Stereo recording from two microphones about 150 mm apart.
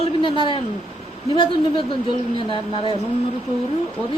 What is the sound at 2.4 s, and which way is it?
Speech, 35° left (ahead or behind).